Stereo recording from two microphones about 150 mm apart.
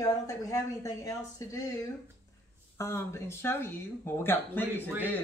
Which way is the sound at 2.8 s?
20° left (ahead or behind).